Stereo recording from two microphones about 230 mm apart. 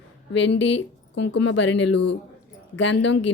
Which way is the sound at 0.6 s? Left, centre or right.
Left.